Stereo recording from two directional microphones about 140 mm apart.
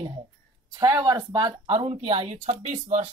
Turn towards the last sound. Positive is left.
turn(degrees=-60)  # may be behind; listen again after turning